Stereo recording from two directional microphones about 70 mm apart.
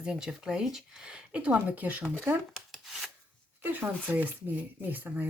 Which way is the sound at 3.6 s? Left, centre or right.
Right.